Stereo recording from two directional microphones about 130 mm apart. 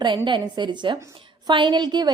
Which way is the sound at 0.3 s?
35° right (ahead or behind).